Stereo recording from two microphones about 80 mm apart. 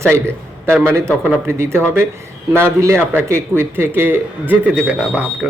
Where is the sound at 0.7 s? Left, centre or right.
Right.